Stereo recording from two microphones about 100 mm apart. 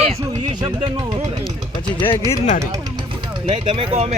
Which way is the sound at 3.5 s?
90° right.